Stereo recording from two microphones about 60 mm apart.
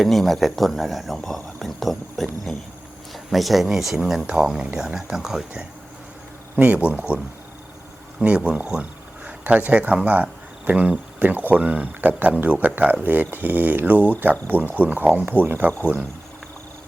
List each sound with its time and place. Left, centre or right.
0.0 s speech: centre
6.6 s speech: right
8.2 s speech: centre
11.9 s speech: right